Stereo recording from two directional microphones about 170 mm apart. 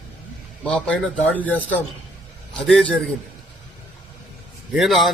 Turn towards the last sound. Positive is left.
turn(degrees=0)  # may be behind; listen again after turning